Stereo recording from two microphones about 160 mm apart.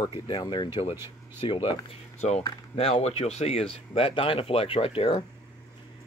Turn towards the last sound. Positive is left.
turn(degrees=35)  # may be behind; listen again after turning